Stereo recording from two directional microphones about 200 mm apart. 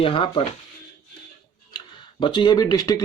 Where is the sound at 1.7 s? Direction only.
20° left (ahead or behind).